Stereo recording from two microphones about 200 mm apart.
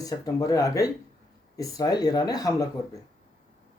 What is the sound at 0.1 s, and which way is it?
A man's voice, 15° left (ahead or behind).